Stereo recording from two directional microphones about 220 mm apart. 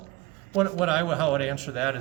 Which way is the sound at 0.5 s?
5° right (ahead or behind).